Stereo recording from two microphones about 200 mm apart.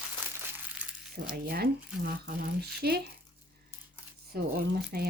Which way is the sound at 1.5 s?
50° right (ahead or behind).